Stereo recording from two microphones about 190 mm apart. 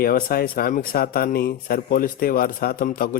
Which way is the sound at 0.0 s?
50° left (ahead or behind).